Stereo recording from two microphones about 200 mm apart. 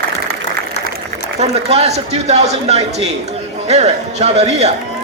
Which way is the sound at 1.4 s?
30° right (ahead or behind).